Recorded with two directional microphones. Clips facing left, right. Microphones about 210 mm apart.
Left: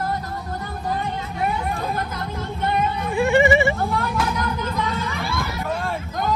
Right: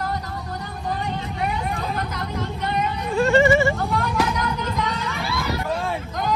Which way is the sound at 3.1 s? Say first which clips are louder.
Right 1 dB; 15° left (ahead or behind).